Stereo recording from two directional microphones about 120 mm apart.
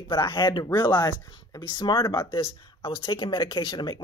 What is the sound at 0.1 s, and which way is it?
Speech, 40° left (ahead or behind).